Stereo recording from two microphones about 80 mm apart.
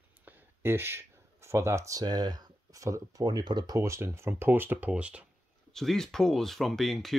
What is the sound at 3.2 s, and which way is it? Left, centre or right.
Speech, right.